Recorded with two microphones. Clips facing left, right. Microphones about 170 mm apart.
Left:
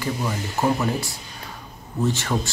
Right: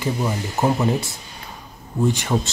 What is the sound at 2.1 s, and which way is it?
Speech, 15° right (ahead or behind).